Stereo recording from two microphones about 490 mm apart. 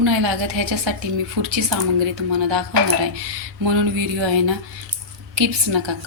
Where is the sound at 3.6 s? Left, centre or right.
Right.